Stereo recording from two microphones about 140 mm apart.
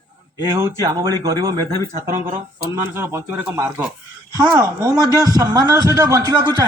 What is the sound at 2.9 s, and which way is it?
A man's voice, 15° right (ahead or behind).